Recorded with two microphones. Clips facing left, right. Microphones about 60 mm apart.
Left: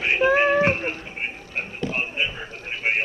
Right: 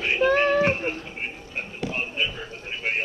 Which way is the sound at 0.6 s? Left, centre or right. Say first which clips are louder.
Left 1 dB; left.